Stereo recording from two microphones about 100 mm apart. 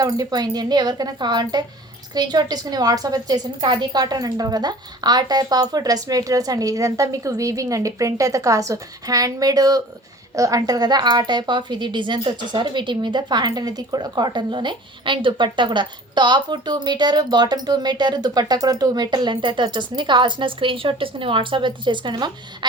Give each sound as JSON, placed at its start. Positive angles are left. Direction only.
{"t": 0.0, "sound": "a woman's voice", "side_deg": -45}